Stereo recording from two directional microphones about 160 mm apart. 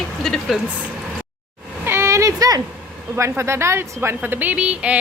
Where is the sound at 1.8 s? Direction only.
15° right (ahead or behind).